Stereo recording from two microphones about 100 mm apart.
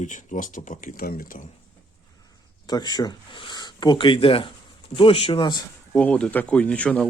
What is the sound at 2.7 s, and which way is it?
Speech, 45° left (ahead or behind).